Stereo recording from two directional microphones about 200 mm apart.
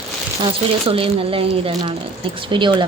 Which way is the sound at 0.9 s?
30° right (ahead or behind).